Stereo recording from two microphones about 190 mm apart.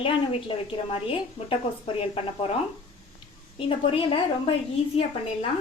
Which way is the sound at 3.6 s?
30° left (ahead or behind).